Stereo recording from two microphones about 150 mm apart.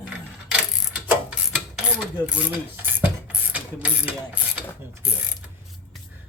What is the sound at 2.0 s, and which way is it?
Mechanisms, 5° right (ahead or behind).